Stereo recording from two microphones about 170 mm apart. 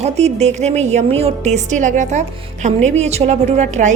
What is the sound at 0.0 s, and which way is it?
A woman's voice, 40° right (ahead or behind).